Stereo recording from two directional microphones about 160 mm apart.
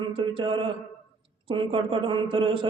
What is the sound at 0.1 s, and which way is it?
Mantra, 35° right (ahead or behind).